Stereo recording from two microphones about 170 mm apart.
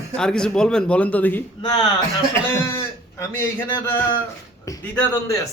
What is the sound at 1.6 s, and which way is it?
Speech, 25° left (ahead or behind).